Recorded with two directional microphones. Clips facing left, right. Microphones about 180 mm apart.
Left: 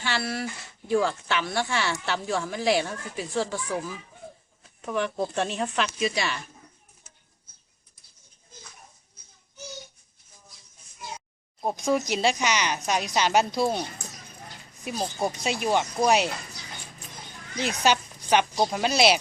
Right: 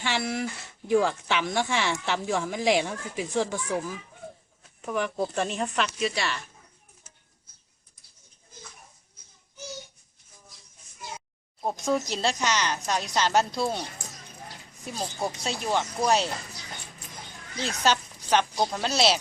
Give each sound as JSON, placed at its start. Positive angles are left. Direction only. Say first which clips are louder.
{"t": 0.0, "sound": "speech", "louder": "right 1 dB", "side_deg": -15}
{"t": 4.8, "sound": "speech", "louder": "left 1 dB", "side_deg": -5}
{"t": 11.6, "sound": "speech", "louder": "left 2 dB", "side_deg": 5}
{"t": 12.0, "sound": "a woman's voice", "louder": "left 3 dB", "side_deg": 15}
{"t": 14.8, "sound": "a woman's voice", "louder": "left 3 dB", "side_deg": 15}
{"t": 17.6, "sound": "a woman's voice", "louder": "left 2 dB", "side_deg": 15}